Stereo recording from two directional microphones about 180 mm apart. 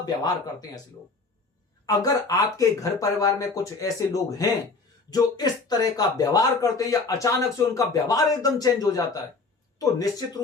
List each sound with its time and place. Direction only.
2.0 s speech: 20° left (ahead or behind)